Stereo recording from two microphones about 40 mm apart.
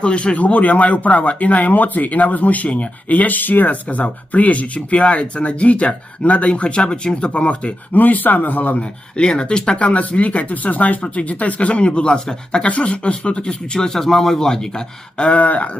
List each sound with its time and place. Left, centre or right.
0.0 s speech: left
7.9 s speech: left
9.1 s speech: left
13.7 s speech: centre
15.2 s speech: left